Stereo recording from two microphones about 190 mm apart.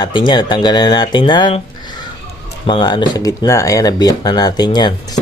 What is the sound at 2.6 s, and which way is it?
Speech, 25° left (ahead or behind).